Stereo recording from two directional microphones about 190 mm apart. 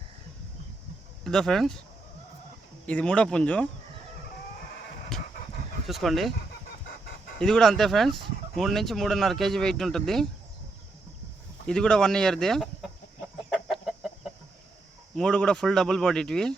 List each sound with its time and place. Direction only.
1.2 s speech: 5° left (ahead or behind)
2.8 s speech: 5° left (ahead or behind)
5.1 s dog: centre (ahead or behind)
5.9 s speech: centre (ahead or behind)
7.3 s speech: 5° left (ahead or behind)
11.6 s chicken: 5° left (ahead or behind)
15.1 s speech: 5° left (ahead or behind)